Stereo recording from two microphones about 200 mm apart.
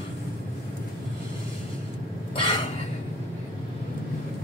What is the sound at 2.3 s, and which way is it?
Cough, 25° left (ahead or behind).